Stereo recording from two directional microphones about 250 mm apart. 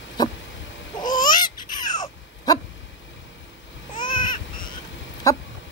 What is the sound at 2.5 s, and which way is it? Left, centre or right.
Dog, centre.